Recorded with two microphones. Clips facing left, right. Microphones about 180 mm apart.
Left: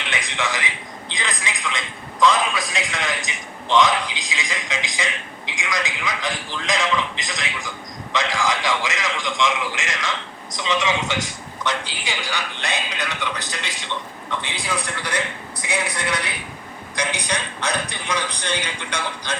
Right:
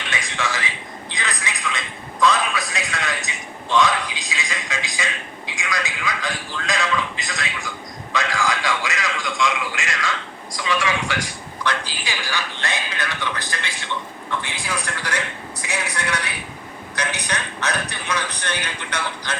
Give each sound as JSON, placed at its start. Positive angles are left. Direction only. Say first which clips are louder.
{"t": 0.1, "sound": "a man's voice", "louder": "even", "side_deg": 20}
{"t": 2.2, "sound": "a man's voice", "louder": "left 1 dB", "side_deg": 20}